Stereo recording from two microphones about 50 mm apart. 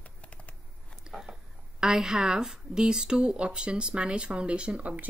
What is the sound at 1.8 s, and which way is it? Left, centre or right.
A woman's voice, centre.